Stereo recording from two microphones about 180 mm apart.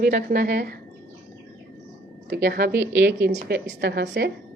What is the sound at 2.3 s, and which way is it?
A woman's voice, 60° right (ahead or behind).